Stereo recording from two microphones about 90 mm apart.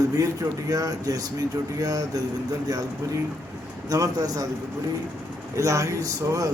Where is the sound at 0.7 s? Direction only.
45° right (ahead or behind).